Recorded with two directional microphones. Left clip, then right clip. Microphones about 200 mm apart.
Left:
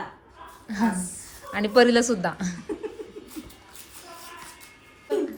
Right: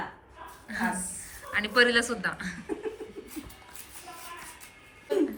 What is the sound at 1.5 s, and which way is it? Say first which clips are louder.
Speech: left 4 dB; 25° left (ahead or behind).